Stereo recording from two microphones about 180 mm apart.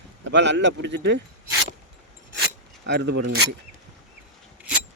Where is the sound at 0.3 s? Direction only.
80° right.